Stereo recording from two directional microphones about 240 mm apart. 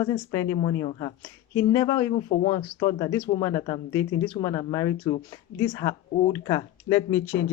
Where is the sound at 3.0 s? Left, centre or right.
Centre.